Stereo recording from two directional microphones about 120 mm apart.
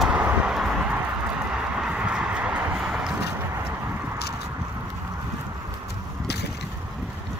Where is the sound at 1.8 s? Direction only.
5° right (ahead or behind).